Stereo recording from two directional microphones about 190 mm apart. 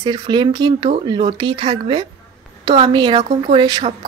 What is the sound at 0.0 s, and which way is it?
A woman's voice, 25° right (ahead or behind).